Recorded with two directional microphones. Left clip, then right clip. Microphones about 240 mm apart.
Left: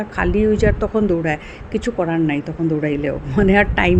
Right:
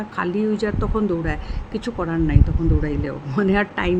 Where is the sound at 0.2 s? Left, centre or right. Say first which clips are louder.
Left 6 dB; centre.